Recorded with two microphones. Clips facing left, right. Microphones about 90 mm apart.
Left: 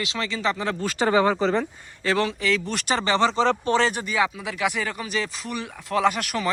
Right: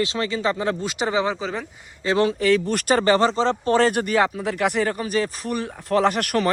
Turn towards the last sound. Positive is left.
turn(degrees=-55)  # may be behind; listen again after turning